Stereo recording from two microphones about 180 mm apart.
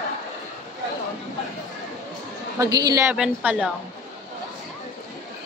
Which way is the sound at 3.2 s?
5° right (ahead or behind).